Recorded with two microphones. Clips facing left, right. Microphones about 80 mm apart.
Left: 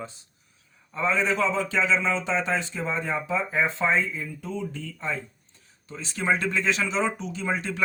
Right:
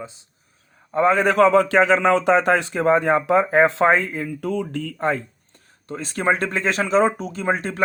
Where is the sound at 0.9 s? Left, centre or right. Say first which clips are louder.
Right 8 dB; right.